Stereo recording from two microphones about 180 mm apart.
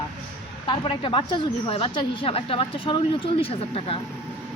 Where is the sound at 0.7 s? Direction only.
30° left (ahead or behind).